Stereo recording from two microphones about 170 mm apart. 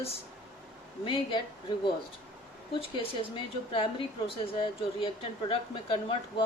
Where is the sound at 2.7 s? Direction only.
30° left (ahead or behind).